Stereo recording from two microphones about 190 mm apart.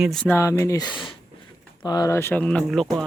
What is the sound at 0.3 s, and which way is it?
Speech, 15° left (ahead or behind).